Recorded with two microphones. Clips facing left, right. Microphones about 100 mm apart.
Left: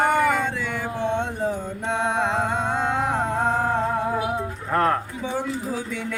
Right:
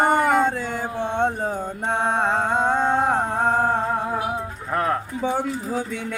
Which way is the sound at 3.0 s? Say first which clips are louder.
Right 2 dB; 55° right (ahead or behind).